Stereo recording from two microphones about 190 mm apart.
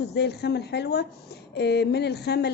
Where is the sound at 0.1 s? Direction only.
60° left (ahead or behind).